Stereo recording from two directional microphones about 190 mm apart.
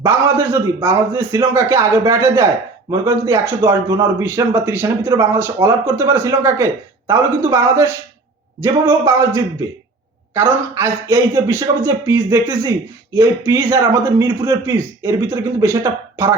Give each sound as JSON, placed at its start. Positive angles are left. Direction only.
{"t": 0.0, "sound": "a man's voice", "side_deg": -15}